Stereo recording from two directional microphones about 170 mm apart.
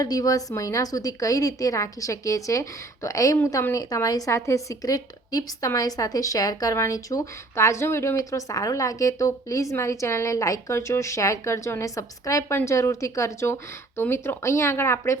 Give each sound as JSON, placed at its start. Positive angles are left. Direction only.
{"t": 0.0, "sound": "a woman's voice", "side_deg": 20}